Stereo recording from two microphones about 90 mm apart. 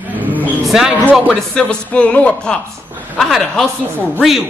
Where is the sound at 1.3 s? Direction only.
10° left (ahead or behind).